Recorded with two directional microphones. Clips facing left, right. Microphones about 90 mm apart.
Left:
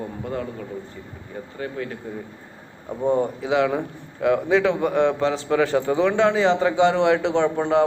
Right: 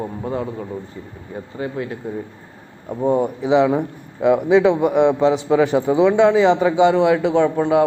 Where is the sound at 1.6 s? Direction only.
15° right (ahead or behind).